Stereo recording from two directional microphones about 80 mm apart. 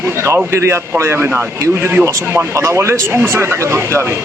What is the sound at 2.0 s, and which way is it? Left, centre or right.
Speech, right.